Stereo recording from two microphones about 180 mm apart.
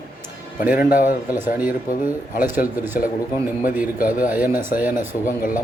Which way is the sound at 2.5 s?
50° left (ahead or behind).